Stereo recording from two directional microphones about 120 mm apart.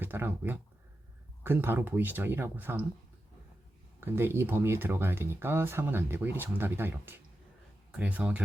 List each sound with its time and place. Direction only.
0.0 s speech: 15° right (ahead or behind)
4.0 s speech: 20° right (ahead or behind)